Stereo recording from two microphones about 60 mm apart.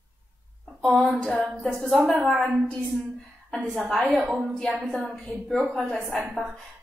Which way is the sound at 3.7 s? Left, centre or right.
Centre.